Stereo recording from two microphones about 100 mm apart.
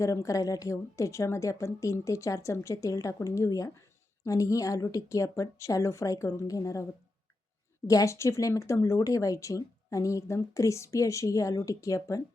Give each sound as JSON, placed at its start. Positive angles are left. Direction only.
{"t": 0.0, "sound": "a woman's voice", "side_deg": 35}
{"t": 7.9, "sound": "a woman's voice", "side_deg": 30}